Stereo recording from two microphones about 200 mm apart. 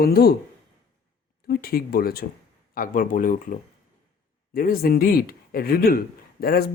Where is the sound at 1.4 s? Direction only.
50° left (ahead or behind).